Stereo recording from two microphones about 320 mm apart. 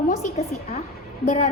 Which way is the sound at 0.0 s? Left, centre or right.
Left.